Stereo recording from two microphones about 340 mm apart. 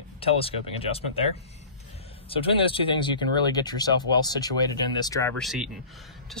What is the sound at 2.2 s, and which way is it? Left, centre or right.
Speech, centre.